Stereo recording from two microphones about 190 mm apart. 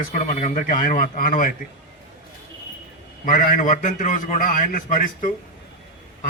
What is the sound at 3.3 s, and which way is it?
A man's voice, 45° left (ahead or behind).